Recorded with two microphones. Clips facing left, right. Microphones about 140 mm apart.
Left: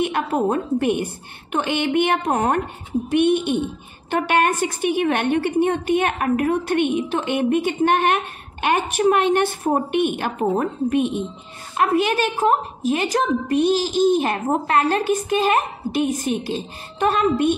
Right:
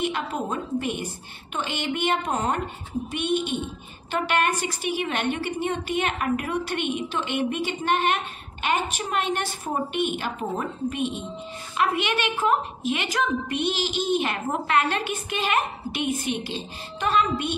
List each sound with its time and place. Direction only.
0.0 s a woman's voice: 55° left (ahead or behind)